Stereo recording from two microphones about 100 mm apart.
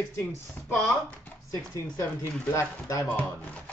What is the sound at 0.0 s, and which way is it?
Speech, 25° left (ahead or behind).